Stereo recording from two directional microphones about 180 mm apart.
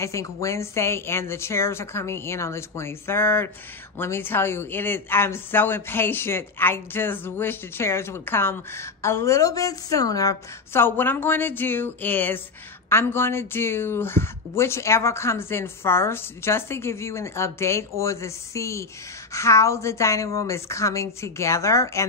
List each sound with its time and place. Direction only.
0.0 s speech: 15° left (ahead or behind)